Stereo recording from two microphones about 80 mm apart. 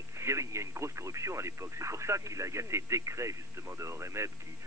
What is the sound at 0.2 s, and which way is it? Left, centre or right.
Speech, right.